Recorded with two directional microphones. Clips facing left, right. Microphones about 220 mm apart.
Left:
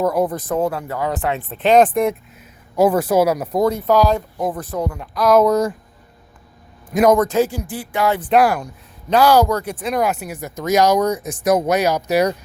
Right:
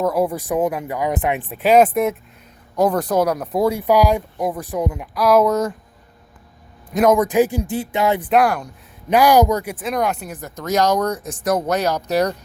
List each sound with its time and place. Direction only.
0.0 s speech: 5° right (ahead or behind)
2.7 s speech: 5° left (ahead or behind)
3.6 s speech: 10° right (ahead or behind)
6.9 s speech: centre (ahead or behind)
7.2 s speech: 15° right (ahead or behind)
7.6 s a sound: 20° right (ahead or behind)
8.3 s speech: 5° left (ahead or behind)
8.6 s speech: 15° right (ahead or behind)
9.7 s speech: centre (ahead or behind)